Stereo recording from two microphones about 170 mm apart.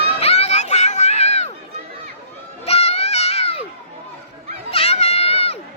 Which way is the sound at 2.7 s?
35° left (ahead or behind).